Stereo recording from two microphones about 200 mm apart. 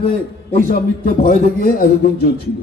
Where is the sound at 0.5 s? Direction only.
45° left (ahead or behind).